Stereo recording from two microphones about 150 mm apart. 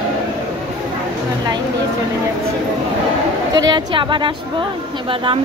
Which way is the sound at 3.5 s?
25° right (ahead or behind).